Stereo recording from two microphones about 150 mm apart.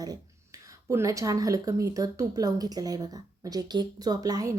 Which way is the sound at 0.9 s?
20° right (ahead or behind).